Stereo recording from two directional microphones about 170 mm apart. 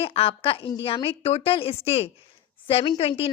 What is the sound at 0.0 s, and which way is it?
A woman's voice, 35° left (ahead or behind).